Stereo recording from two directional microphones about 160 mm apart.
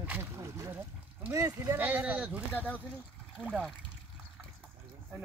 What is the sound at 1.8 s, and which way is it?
Speech, 10° right (ahead or behind).